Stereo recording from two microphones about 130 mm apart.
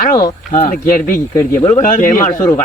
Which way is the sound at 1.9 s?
80° left.